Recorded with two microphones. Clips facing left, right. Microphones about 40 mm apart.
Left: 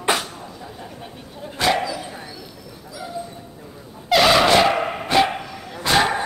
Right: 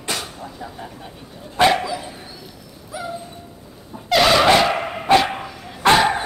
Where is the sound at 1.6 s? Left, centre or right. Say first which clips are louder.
Right 5 dB; right.